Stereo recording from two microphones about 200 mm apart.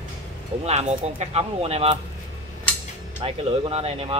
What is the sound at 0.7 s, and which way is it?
Speech, 35° right (ahead or behind).